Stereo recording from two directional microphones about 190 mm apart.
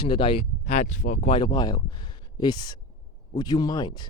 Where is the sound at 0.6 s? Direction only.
40° left (ahead or behind).